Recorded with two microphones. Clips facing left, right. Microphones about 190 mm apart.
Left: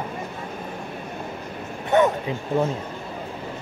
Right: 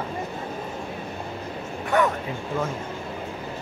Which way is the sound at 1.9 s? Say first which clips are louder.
Left 4 dB; 20° left (ahead or behind).